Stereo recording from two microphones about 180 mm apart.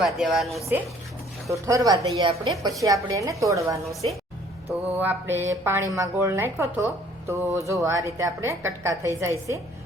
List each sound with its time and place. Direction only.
0.0 s a woman's voice: 5° right (ahead or behind)
1.5 s a woman's voice: 15° right (ahead or behind)
4.9 s a woman's voice: 10° right (ahead or behind)